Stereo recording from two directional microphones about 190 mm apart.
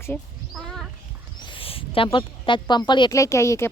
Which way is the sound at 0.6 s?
Centre (ahead or behind).